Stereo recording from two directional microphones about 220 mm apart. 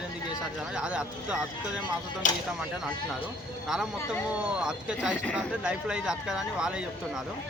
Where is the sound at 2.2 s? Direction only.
35° left (ahead or behind).